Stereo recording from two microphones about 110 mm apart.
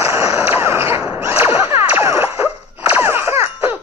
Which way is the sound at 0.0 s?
25° right (ahead or behind).